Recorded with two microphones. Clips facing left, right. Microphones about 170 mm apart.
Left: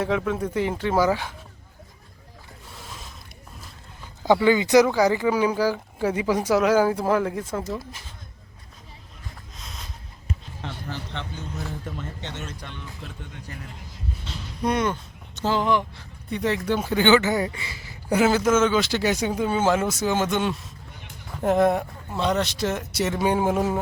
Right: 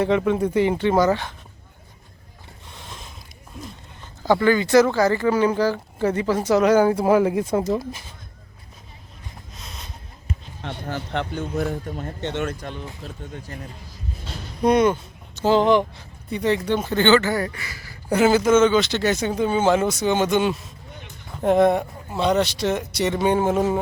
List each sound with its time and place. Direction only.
0.0 s speech: centre (ahead or behind)
2.7 s a sound: 5° left (ahead or behind)
4.2 s speech: 15° left (ahead or behind); by 7.4 s 5° right (ahead or behind)
9.6 s a sound: centre (ahead or behind)
10.9 s speech: 55° right (ahead or behind)
14.6 s speech: 20° right (ahead or behind)
16.3 s speech: centre (ahead or behind); by 17.9 s 25° left (ahead or behind)
18.1 s speech: centre (ahead or behind)